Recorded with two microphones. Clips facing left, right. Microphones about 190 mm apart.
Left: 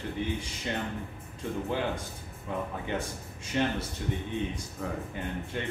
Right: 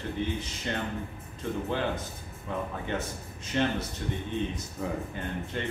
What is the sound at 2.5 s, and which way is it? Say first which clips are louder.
Speech: even; 15° left (ahead or behind).